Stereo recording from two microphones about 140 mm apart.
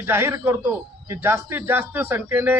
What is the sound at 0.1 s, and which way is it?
A man's voice, 20° right (ahead or behind).